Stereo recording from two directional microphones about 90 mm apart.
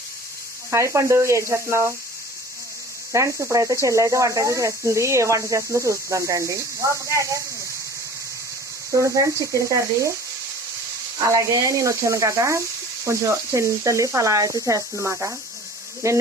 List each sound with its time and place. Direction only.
0.7 s speech: 35° right (ahead or behind)
3.1 s speech: 35° right (ahead or behind)
9.0 s speech: 35° right (ahead or behind)
11.2 s speech: 40° right (ahead or behind)